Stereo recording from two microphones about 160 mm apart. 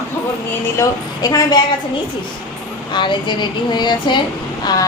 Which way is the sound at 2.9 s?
30° left (ahead or behind).